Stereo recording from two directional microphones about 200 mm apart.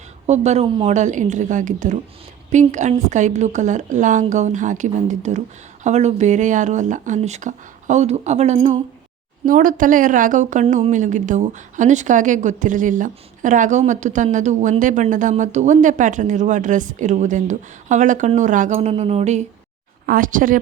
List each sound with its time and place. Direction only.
0.3 s a woman's voice: 35° right (ahead or behind)